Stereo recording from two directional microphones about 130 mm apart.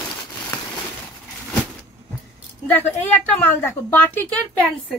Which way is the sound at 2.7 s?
15° left (ahead or behind).